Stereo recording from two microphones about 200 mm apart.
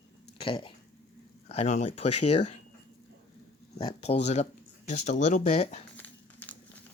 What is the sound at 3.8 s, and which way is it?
Speech, 25° left (ahead or behind).